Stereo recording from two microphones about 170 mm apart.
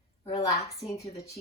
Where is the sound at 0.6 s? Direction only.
35° left (ahead or behind).